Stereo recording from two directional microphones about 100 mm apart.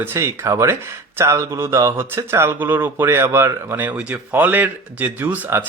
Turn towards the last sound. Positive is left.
turn(degrees=-20)  # may be behind; listen again after turning